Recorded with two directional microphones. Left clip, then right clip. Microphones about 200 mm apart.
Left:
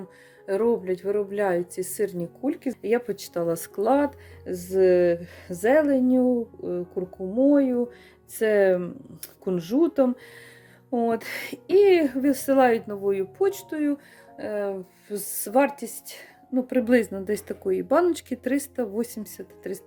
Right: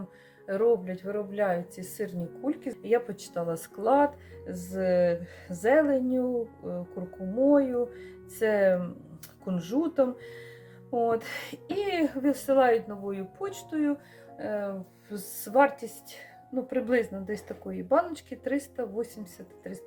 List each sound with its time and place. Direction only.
0.4 s speech: 45° left (ahead or behind)
7.3 s speech: 40° left (ahead or behind)